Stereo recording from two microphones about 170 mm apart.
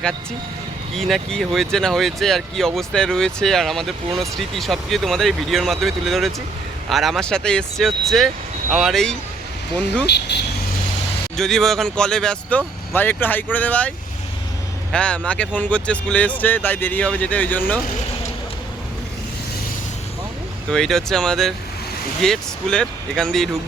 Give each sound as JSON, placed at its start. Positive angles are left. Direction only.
{"t": 0.9, "sound": "speech", "side_deg": 0}
{"t": 10.1, "sound": "speech", "side_deg": 80}
{"t": 11.3, "sound": "speech", "side_deg": 0}
{"t": 14.9, "sound": "speech", "side_deg": 5}
{"t": 20.7, "sound": "speech", "side_deg": 5}